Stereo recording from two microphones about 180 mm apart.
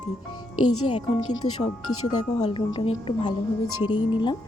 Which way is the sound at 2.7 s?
25° left (ahead or behind).